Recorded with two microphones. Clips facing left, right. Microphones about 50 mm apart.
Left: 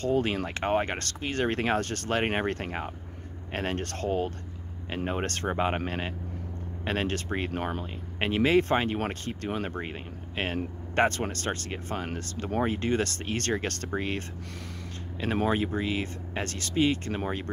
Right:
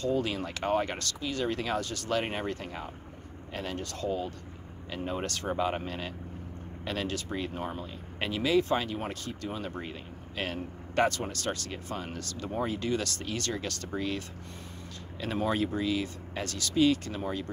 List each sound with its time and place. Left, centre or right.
0.0 s speech: left
4.8 s speech: left
15.5 s speech: left